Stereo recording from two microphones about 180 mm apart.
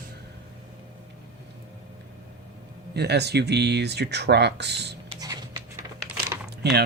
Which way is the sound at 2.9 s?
65° right (ahead or behind).